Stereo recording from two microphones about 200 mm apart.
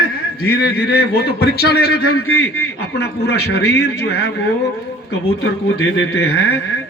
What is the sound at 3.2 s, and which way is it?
Speech, 55° left (ahead or behind).